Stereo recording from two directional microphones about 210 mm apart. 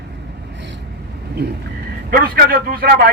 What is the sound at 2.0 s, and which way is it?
Speech, 45° right (ahead or behind).